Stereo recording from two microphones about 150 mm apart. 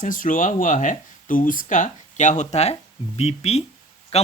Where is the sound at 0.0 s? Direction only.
60° left (ahead or behind).